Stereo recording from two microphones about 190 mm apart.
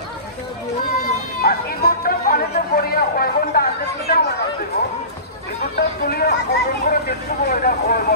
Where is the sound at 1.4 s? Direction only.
50° left (ahead or behind).